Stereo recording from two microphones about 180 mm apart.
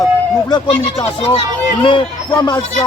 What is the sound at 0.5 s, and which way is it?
Speech, 30° left (ahead or behind).